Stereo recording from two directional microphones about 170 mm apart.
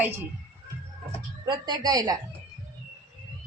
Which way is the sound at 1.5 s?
25° right (ahead or behind).